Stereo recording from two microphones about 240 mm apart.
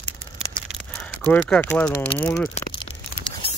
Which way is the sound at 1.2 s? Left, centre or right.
Centre.